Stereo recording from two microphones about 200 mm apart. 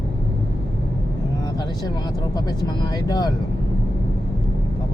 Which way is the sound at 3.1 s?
20° left (ahead or behind).